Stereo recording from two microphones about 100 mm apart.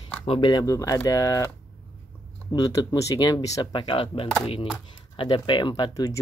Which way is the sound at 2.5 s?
35° left (ahead or behind).